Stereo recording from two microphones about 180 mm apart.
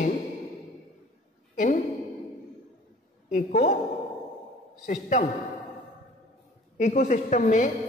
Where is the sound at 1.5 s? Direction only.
45° left (ahead or behind).